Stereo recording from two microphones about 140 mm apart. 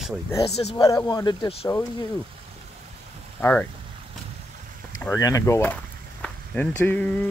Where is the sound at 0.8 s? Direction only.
25° left (ahead or behind).